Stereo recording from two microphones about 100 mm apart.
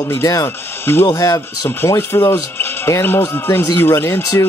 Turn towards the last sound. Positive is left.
turn(degrees=25)  # may be behind; listen again after turning